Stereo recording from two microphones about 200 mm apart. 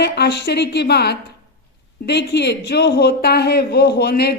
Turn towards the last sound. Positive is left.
turn(degrees=50)  # may be behind; listen again after turning